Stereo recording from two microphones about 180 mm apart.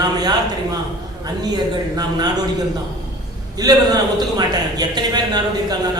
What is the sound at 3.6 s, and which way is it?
A man's voice, 20° right (ahead or behind).